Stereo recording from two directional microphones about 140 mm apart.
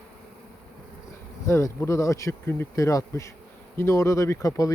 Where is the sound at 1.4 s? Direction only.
20° left (ahead or behind).